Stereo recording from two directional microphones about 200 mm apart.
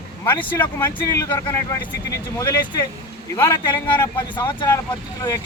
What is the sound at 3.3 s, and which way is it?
Speech, 15° left (ahead or behind).